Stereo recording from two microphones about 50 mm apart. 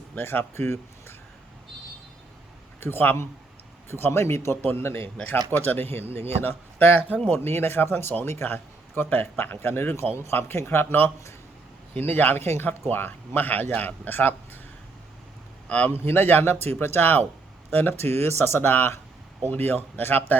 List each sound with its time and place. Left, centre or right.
0.2 s a man's voice: left
2.8 s a man's voice: left
4.6 s a man's voice: left
5.2 s a man's voice: left
15.9 s a man's voice: left